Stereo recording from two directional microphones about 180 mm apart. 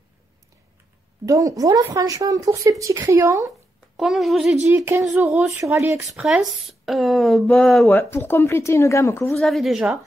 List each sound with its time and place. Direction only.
1.2 s speech: 20° right (ahead or behind)
3.9 s speech: centre (ahead or behind)
4.6 s speech: 15° right (ahead or behind)
7.9 s speech: 15° left (ahead or behind)
9.3 s speech: centre (ahead or behind)